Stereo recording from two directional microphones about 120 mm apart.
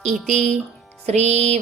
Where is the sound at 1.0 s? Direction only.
65° right (ahead or behind).